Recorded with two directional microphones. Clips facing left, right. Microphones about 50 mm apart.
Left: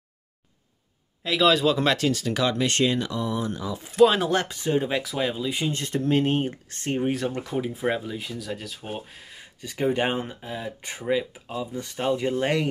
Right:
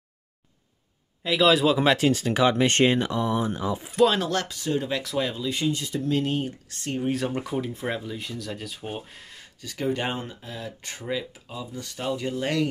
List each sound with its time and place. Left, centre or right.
1.2 s speech: centre; by 3.8 s right
3.8 s speech: centre
4.3 s speech: left
5.0 s speech: centre
5.7 s speech: left
7.2 s speech: centre
7.6 s speech: centre
9.6 s speech: left